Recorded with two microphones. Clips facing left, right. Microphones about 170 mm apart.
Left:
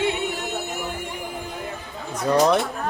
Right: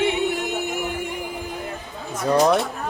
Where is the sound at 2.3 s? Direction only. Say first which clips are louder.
Right 1 dB; 5° right (ahead or behind).